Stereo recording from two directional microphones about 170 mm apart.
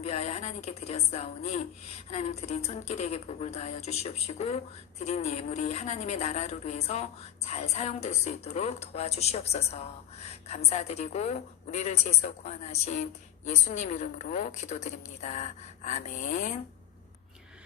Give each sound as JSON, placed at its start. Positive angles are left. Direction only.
{"t": 0.0, "sound": "speech", "side_deg": 40}